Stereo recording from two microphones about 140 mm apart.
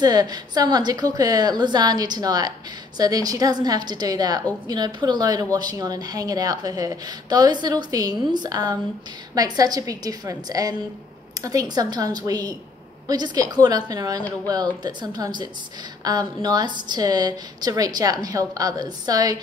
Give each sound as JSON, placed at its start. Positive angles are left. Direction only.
{"t": 0.0, "sound": "speech", "side_deg": -30}